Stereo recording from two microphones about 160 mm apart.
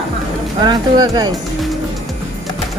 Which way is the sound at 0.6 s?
25° right (ahead or behind).